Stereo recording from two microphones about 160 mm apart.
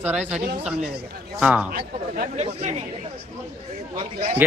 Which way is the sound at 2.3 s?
40° right (ahead or behind).